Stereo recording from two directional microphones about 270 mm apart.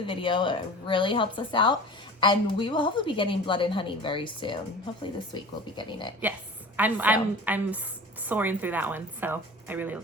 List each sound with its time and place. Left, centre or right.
0.0 s a woman's voice: centre
6.7 s a woman's voice: centre